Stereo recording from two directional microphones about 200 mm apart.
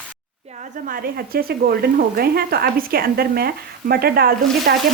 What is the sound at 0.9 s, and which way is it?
Speech, 50° right (ahead or behind).